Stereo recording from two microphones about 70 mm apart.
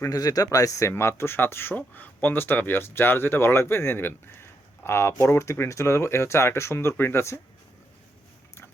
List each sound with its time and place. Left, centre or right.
0.1 s speech: left